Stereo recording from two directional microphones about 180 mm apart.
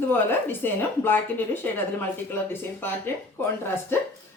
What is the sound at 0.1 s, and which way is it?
Speech, 10° left (ahead or behind).